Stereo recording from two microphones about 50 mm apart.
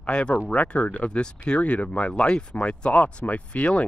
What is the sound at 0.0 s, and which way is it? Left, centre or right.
Speech, left.